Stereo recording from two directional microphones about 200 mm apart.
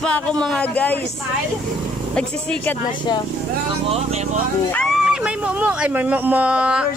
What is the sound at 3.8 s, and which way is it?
Speech, 30° right (ahead or behind).